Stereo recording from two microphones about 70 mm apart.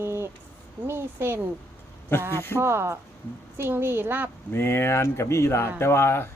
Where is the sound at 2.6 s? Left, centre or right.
Right.